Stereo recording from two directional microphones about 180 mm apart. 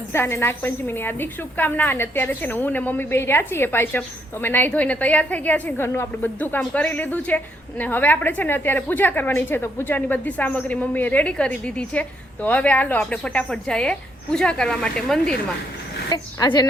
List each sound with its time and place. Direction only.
0.1 s a woman's voice: 15° left (ahead or behind)
16.0 s a woman's voice: 20° left (ahead or behind)